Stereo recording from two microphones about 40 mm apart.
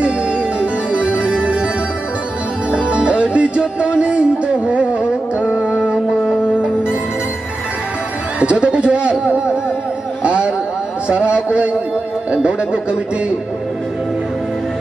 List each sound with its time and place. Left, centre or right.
0.6 s harpsichord: right
2.7 s music: right
8.4 s music: right
10.2 s a sound: right
11.1 s a man's voice: right